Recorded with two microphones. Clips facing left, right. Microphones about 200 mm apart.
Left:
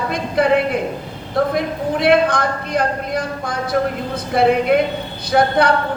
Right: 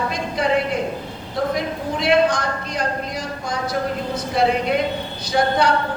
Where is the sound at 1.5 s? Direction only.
55° left (ahead or behind).